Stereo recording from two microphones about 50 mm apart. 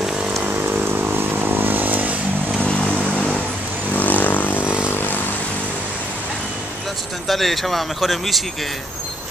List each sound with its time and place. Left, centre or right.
0.4 s vehicle: right
2.6 s vehicle: left
3.9 s vehicle: left
7.2 s speech: centre